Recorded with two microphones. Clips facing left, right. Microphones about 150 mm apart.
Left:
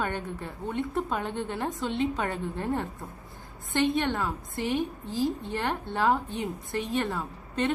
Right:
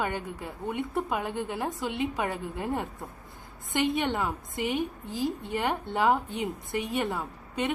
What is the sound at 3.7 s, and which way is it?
A woman's voice, 15° right (ahead or behind).